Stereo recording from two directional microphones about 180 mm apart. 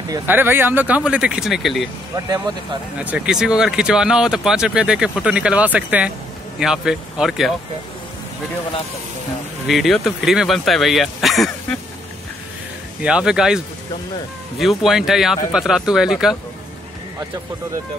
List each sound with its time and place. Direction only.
0.1 s speech: 10° right (ahead or behind)
2.1 s speech: 20° right (ahead or behind)
3.0 s speech: 5° right (ahead or behind)
9.7 s speech: centre (ahead or behind)
13.0 s speech: 5° right (ahead or behind)
14.6 s speech: centre (ahead or behind)